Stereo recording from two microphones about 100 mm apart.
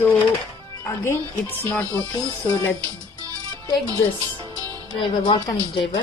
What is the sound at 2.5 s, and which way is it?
Speech, 30° left (ahead or behind).